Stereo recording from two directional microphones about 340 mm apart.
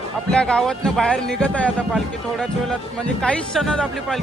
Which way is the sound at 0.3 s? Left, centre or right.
Centre.